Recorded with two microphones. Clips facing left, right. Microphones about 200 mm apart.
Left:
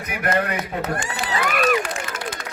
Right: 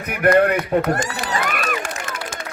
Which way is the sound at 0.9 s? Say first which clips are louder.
Right 5 dB; 40° right (ahead or behind).